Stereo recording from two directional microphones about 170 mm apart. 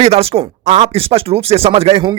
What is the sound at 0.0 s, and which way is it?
Speech, 35° right (ahead or behind).